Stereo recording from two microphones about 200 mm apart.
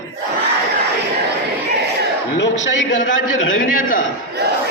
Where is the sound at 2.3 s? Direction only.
70° left (ahead or behind).